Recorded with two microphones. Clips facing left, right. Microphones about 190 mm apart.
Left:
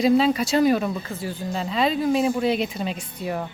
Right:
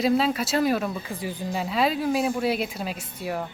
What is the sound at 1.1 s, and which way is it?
Speech, 15° right (ahead or behind).